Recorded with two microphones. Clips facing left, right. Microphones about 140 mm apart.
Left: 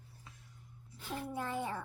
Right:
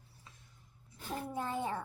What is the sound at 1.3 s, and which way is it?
Speech, 30° right (ahead or behind).